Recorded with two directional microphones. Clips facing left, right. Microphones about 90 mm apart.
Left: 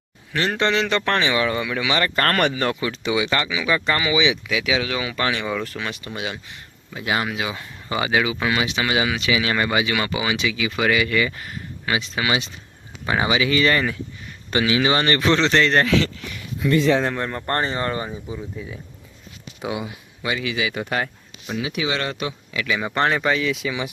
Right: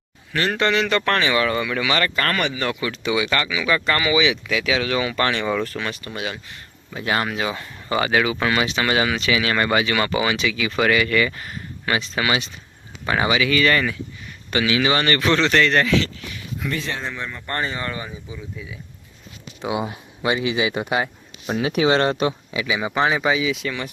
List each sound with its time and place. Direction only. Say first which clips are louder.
0.3 s speech: right 1 dB; 20° left (ahead or behind)
2.1 s speech: left 3 dB; 45° left (ahead or behind); by 15.9 s 25° left (ahead or behind)
17.0 s speech: left 6 dB; 50° left (ahead or behind)
19.8 s speech: right 5 dB; 30° right (ahead or behind)
20.8 s speech: right 2 dB; 15° right (ahead or behind)
21.4 s speech: right 6 dB; 45° right (ahead or behind)
22.5 s speech: right 1 dB; 10° right (ahead or behind)